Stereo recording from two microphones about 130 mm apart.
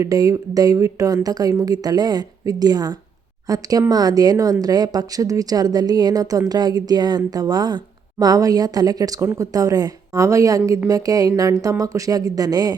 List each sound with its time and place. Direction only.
0.0 s speech: 25° right (ahead or behind)